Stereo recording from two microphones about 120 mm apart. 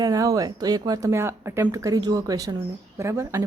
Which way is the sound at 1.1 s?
20° right (ahead or behind).